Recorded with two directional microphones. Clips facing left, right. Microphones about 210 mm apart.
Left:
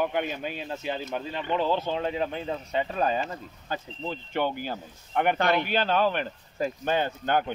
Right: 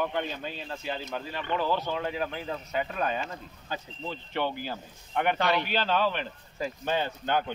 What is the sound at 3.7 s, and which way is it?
Speech, 50° left (ahead or behind).